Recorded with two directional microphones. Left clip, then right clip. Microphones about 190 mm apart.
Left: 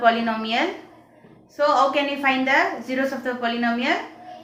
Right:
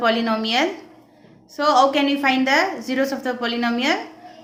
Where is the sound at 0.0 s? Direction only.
35° right (ahead or behind).